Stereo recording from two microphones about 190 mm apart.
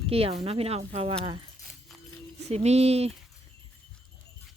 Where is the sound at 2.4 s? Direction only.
35° right (ahead or behind).